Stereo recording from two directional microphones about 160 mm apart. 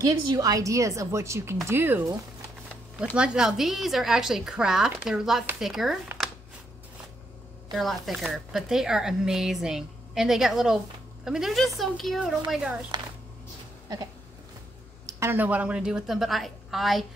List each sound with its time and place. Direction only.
0.3 s a woman's voice: 20° right (ahead or behind)
3.2 s speech: 5° right (ahead or behind)
7.7 s speech: centre (ahead or behind)
12.9 s a sound: 25° right (ahead or behind)
15.0 s speech: 20° right (ahead or behind); by 17.0 s centre (ahead or behind)